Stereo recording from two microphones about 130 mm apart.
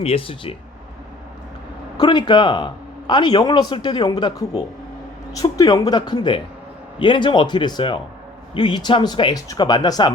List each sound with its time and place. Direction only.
0.0 s speech: 45° left (ahead or behind)
2.0 s a man's voice: 35° left (ahead or behind)